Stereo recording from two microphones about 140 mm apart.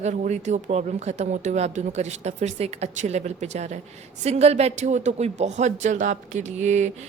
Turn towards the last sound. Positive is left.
turn(degrees=-55)  # may be behind; listen again after turning